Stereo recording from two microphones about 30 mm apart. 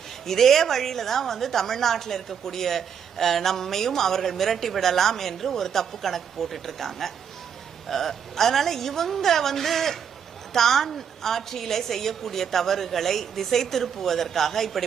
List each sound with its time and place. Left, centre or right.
0.3 s a woman's voice: centre